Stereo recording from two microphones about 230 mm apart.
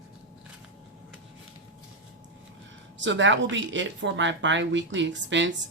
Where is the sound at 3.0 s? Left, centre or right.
Right.